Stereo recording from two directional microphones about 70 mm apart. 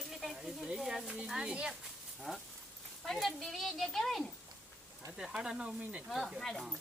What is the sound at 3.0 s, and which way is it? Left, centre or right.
Speech, centre.